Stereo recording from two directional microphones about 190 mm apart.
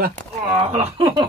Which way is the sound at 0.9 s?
30° right (ahead or behind).